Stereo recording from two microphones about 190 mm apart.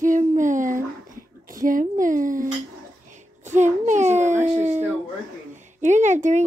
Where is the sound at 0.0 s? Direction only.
40° right (ahead or behind).